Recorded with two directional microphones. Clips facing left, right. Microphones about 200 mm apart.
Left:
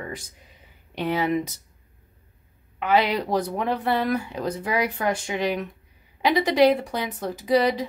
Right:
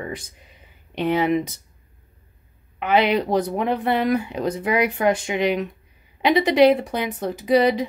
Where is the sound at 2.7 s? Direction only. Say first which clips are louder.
Right 3 dB; 20° right (ahead or behind).